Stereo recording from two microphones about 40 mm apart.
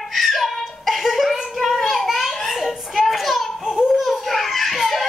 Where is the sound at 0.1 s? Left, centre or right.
Centre.